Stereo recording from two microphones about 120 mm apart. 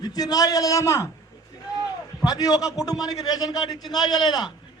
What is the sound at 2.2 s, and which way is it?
A man's voice, 30° left (ahead or behind).